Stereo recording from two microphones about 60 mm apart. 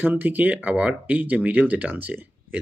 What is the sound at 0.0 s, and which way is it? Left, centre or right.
Speech, right.